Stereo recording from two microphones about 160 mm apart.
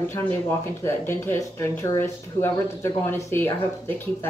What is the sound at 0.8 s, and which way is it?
Speech, 15° left (ahead or behind).